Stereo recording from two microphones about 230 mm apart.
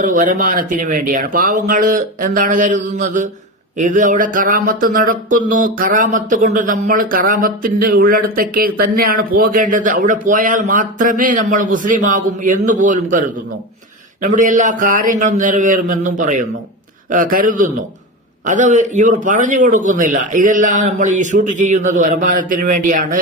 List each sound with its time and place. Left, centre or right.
0.0 s speech: right